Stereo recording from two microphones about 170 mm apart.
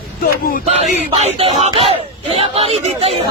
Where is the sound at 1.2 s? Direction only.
35° right (ahead or behind).